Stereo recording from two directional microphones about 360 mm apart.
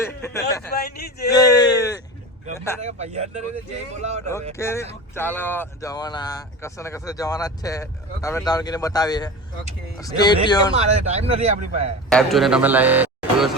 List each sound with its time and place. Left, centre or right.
0.0 s speech: centre
0.7 s a man's voice: left
1.3 s a sound: centre
2.6 s speech: centre
2.8 s a man's voice: centre
4.5 s speech: centre
10.8 s a man's voice: centre
12.0 s a man's voice: centre